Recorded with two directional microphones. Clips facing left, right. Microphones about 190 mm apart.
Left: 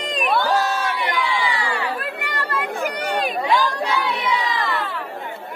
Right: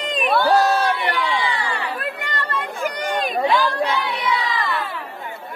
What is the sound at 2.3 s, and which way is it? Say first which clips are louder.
Chatter: left 1 dB; 10° left (ahead or behind).